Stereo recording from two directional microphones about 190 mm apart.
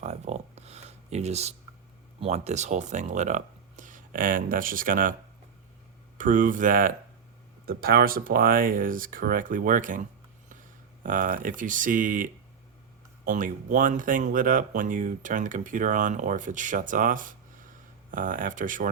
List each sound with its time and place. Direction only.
0.0 s a sound: 35° right (ahead or behind)
2.2 s speech: 35° right (ahead or behind)
6.1 s speech: 45° right (ahead or behind)